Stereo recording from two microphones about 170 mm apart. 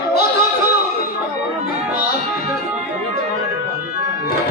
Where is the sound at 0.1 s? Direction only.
65° left (ahead or behind).